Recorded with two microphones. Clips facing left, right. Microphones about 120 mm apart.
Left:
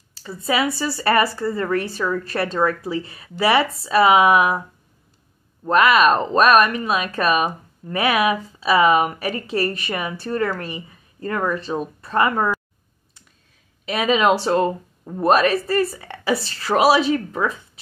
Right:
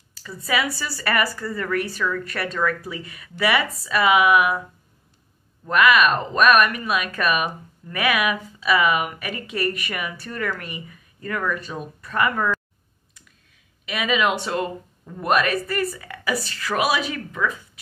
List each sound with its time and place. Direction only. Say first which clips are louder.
0.1 s speech: left 3 dB; 30° left (ahead or behind)
5.7 s speech: left 3 dB; 30° left (ahead or behind)
13.8 s speech: left 5 dB; 35° left (ahead or behind)